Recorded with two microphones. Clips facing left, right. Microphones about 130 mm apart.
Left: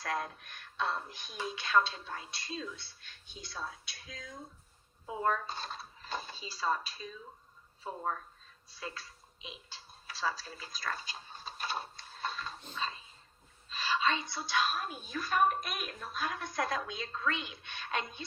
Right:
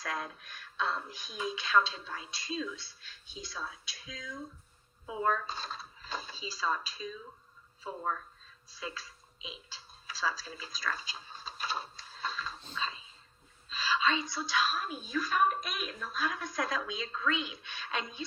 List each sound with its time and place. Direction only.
0.0 s a woman's voice: 55° left (ahead or behind)